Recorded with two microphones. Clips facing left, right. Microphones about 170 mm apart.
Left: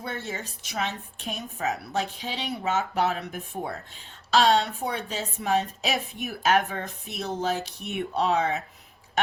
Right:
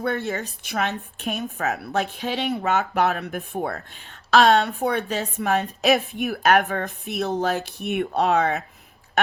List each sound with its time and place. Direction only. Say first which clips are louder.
0.3 s a woman's voice: right 7 dB; 60° right (ahead or behind)